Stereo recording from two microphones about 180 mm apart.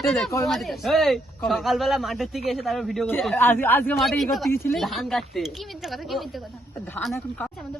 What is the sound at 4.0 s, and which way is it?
Speech, centre (ahead or behind).